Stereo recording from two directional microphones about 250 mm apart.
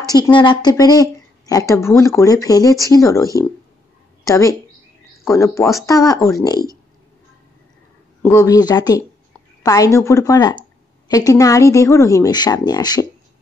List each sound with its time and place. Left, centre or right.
0.0 s a woman's voice: centre
8.2 s speech: centre